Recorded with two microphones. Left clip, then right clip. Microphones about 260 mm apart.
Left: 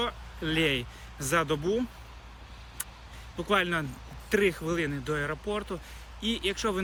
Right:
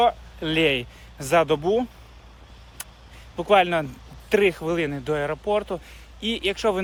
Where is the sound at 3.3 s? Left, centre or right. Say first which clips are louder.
Right 9 dB; centre.